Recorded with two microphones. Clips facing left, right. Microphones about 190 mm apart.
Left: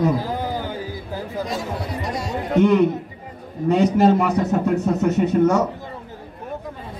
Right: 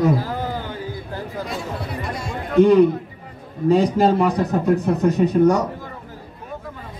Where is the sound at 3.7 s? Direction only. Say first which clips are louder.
Left 1 dB; 35° right (ahead or behind).